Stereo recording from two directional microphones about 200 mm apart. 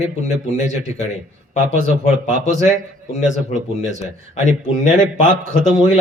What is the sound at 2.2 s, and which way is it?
Speech, 35° left (ahead or behind).